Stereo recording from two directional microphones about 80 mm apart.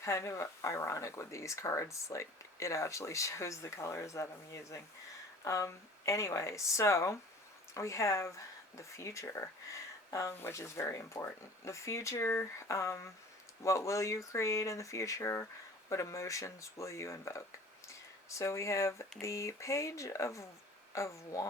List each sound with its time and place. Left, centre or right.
0.0 s speech: left